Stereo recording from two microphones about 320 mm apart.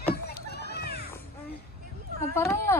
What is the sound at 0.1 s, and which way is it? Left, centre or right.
Children playing, left.